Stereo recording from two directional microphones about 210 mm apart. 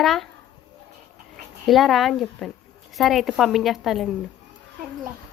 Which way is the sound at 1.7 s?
Centre (ahead or behind).